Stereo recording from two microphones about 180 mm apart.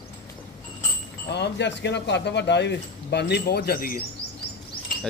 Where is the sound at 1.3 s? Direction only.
70° left (ahead or behind).